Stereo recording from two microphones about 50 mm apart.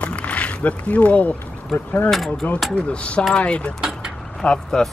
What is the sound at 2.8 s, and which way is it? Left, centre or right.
Speech, left.